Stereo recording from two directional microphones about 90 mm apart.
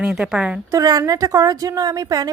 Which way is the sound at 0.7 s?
40° right (ahead or behind).